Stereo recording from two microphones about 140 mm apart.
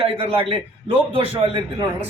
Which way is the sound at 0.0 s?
40° right (ahead or behind).